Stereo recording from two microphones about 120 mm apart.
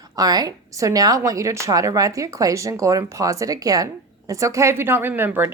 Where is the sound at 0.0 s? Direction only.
30° right (ahead or behind).